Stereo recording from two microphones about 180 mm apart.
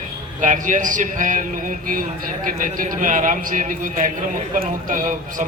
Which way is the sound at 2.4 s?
50° right (ahead or behind).